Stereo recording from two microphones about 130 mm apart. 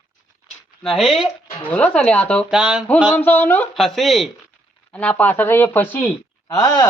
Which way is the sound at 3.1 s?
15° left (ahead or behind).